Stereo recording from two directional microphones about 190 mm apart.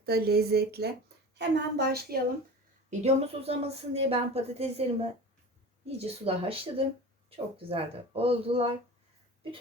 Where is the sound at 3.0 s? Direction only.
30° right (ahead or behind).